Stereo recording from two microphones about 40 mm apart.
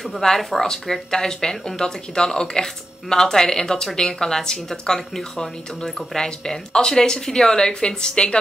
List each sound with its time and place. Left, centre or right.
0.0 s speech: centre